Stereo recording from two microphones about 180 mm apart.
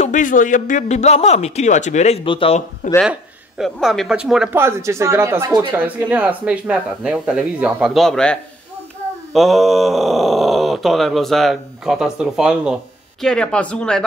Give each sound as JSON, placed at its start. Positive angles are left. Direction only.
{"t": 0.0, "sound": "a man's voice", "side_deg": 45}
{"t": 3.0, "sound": "speech", "side_deg": 0}